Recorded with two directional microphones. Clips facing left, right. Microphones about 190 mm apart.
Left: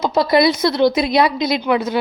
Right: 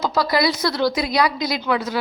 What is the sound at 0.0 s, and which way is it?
A woman's voice, 25° left (ahead or behind).